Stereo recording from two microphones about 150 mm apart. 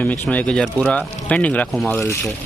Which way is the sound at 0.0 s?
10° left (ahead or behind).